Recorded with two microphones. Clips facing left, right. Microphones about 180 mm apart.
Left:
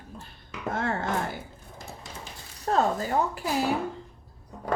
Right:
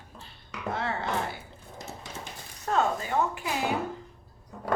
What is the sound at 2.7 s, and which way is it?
Speech, 40° left (ahead or behind).